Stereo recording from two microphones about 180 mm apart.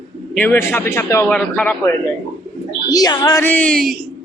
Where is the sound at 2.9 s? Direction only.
20° left (ahead or behind); by 3.9 s 5° left (ahead or behind).